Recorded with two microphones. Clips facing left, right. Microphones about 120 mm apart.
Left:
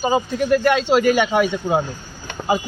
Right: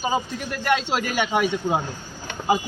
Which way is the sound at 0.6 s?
Centre (ahead or behind).